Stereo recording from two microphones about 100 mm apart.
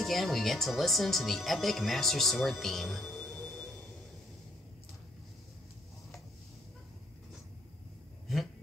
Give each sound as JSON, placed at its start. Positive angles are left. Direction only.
{"t": 0.0, "sound": "speech", "side_deg": 0}